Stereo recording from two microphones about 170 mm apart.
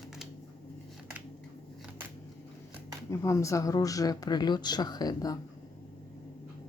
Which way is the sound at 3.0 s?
15° left (ahead or behind).